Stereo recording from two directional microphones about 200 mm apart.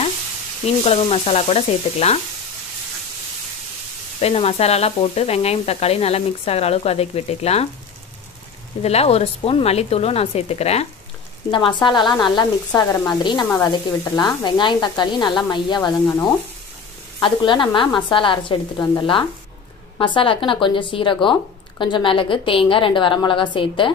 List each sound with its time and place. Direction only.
0.8 s sizzle: 30° left (ahead or behind)
4.2 s sizzle: 30° left (ahead or behind)
8.8 s sizzle: 30° left (ahead or behind)
11.5 s speech: 25° left (ahead or behind)
17.2 s speech: 25° left (ahead or behind)